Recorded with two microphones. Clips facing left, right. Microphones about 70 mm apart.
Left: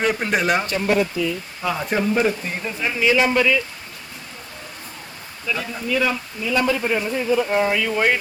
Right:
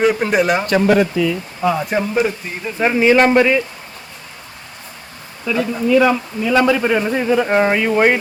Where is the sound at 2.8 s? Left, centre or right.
Right.